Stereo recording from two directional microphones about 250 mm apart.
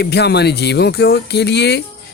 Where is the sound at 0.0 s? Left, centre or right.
Left.